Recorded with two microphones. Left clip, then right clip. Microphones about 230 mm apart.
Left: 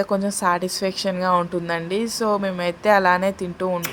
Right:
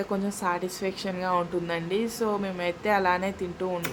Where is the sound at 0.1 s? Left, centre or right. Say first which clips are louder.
Left 6 dB; left.